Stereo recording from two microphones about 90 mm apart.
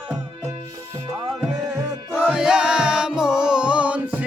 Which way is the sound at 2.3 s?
5° right (ahead or behind).